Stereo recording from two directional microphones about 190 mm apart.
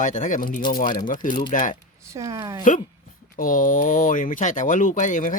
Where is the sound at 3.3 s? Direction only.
45° left (ahead or behind).